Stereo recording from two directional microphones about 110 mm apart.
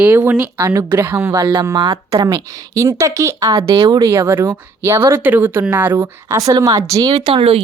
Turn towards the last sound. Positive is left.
turn(degrees=-60)  # may be behind; listen again after turning